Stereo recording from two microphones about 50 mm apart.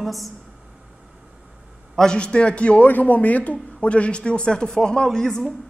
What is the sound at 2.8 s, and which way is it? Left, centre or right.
A man's voice, left.